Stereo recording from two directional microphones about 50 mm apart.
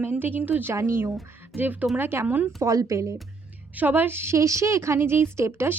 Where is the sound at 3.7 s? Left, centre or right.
Right.